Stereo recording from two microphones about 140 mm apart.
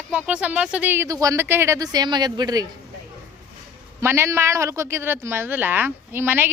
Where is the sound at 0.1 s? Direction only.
10° right (ahead or behind); by 2.6 s 30° right (ahead or behind).